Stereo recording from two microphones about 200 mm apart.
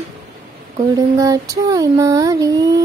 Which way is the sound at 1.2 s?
15° right (ahead or behind).